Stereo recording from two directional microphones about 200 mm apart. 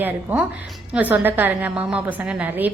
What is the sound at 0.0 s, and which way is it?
A woman's voice, 10° right (ahead or behind).